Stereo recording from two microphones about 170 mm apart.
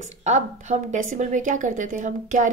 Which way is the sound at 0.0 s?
45° right (ahead or behind).